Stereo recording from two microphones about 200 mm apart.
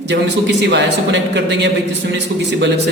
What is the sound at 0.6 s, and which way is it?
A man's voice, 60° right (ahead or behind).